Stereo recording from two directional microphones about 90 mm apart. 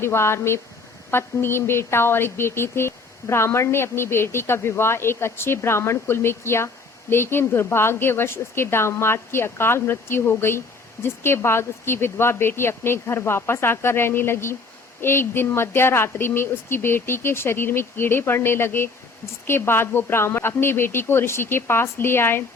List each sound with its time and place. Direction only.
0.0 s speech: 30° left (ahead or behind)